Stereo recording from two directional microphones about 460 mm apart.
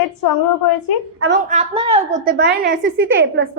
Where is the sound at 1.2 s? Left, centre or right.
Right.